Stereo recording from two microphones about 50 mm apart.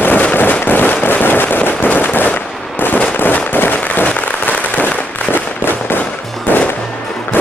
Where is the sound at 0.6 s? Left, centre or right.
Left.